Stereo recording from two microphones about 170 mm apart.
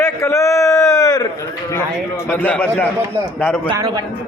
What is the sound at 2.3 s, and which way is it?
A man's voice, 10° left (ahead or behind).